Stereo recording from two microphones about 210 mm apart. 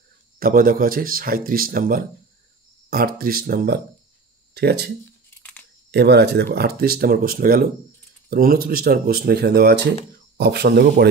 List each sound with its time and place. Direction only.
0.4 s speech: 40° right (ahead or behind)